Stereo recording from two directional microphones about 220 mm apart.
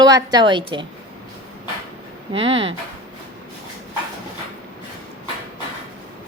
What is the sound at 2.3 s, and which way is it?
Speech, 25° right (ahead or behind).